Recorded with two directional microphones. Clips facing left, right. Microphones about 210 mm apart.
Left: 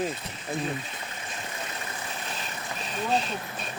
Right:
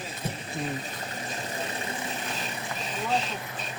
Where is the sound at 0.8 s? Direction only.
35° right (ahead or behind).